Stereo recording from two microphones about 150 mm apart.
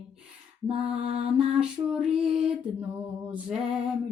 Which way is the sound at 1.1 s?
40° right (ahead or behind).